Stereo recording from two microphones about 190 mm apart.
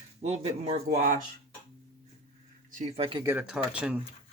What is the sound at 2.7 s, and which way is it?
Speech, 40° right (ahead or behind).